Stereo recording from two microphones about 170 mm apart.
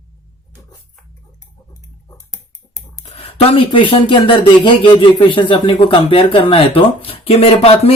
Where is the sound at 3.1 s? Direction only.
35° left (ahead or behind).